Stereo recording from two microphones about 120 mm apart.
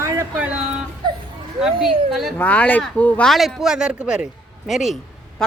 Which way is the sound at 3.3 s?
Centre (ahead or behind).